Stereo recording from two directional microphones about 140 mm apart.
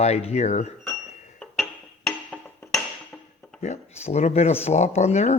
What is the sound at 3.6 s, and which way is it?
Speech, 50° left (ahead or behind).